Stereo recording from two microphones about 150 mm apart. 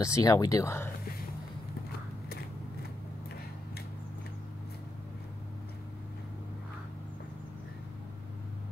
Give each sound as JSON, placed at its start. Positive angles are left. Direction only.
{"t": 0.0, "sound": "speech", "side_deg": 20}